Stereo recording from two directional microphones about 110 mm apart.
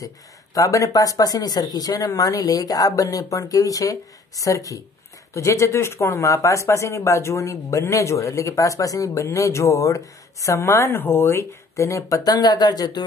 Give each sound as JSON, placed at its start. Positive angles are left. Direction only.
{"t": 0.6, "sound": "speech", "side_deg": 30}